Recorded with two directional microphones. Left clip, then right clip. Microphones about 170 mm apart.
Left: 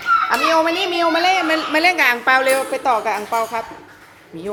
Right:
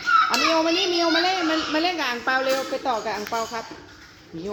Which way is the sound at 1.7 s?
15° left (ahead or behind).